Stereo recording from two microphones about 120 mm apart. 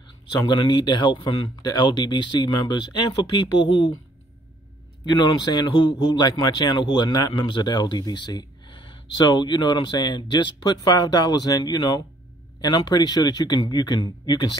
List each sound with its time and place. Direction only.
0.5 s a man's voice: 40° left (ahead or behind)
5.0 s a man's voice: 35° left (ahead or behind)